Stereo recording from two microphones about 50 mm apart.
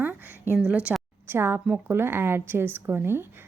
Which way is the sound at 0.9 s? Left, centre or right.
Centre.